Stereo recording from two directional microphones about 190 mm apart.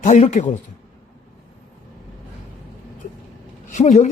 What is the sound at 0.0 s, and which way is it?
Speech, 40° left (ahead or behind).